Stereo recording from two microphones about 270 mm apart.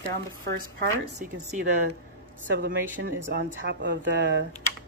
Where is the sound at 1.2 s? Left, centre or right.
Right.